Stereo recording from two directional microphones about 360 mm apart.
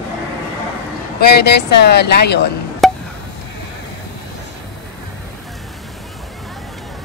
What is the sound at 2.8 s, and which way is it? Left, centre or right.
Chop, centre.